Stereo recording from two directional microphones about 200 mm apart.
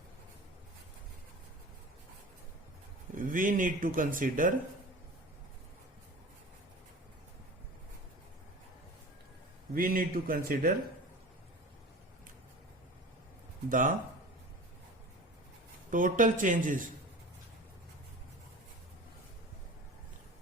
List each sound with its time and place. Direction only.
3.2 s speech: 45° right (ahead or behind)
9.7 s speech: 45° right (ahead or behind)
13.7 s a man's voice: 40° right (ahead or behind)
15.9 s a man's voice: 40° right (ahead or behind)